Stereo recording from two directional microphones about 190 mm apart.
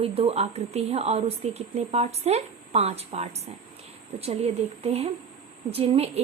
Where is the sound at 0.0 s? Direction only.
30° right (ahead or behind).